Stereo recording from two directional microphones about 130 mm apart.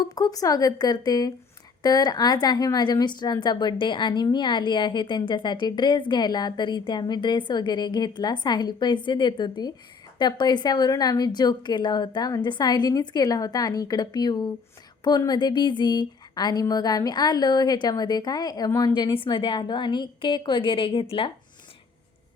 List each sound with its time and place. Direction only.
0.1 s speech: 30° left (ahead or behind)